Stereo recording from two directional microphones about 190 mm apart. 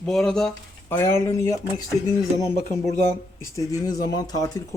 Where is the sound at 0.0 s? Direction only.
5° left (ahead or behind).